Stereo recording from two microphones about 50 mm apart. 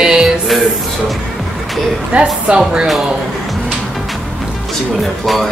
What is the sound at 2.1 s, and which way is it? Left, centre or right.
Speech, right.